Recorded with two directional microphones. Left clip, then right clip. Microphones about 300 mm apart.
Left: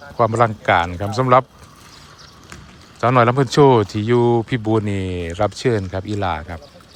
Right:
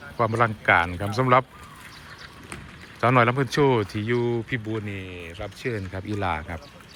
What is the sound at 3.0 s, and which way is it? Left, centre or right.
Speech, centre.